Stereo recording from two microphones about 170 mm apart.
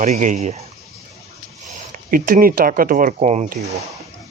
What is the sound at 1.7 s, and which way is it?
Speech, 55° right (ahead or behind).